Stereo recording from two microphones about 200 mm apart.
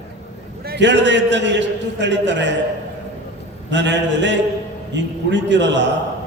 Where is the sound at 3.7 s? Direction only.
60° right (ahead or behind).